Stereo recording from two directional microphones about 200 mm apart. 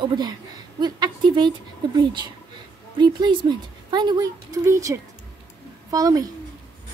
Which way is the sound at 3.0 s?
20° right (ahead or behind).